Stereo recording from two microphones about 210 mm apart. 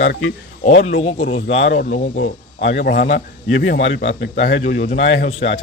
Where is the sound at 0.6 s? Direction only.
35° left (ahead or behind).